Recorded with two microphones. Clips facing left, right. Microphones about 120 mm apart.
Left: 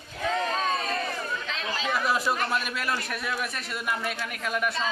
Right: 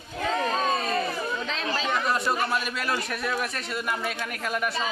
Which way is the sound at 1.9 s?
5° left (ahead or behind).